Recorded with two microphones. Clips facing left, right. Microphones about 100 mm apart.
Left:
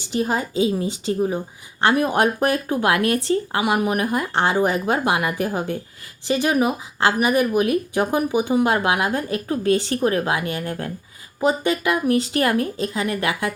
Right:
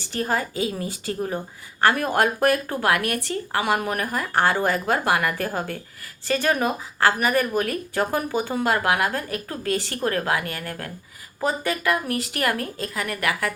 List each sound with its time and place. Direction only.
0.0 s a woman's voice: 15° left (ahead or behind)
3.6 s a woman's voice: 15° left (ahead or behind)